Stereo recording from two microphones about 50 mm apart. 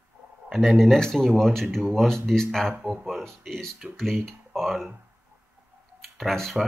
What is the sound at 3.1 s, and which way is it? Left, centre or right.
Speech, centre.